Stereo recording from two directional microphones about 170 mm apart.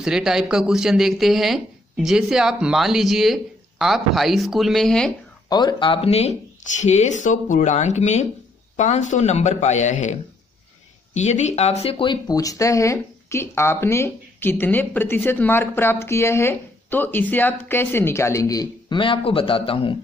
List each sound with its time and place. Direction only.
0.0 s speech: 5° right (ahead or behind)
5.5 s speech: 25° left (ahead or behind); by 10.1 s 45° left (ahead or behind)
11.1 s speech: 40° left (ahead or behind)